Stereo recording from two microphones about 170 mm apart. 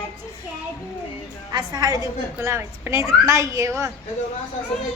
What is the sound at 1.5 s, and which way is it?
A woman's voice, 25° right (ahead or behind).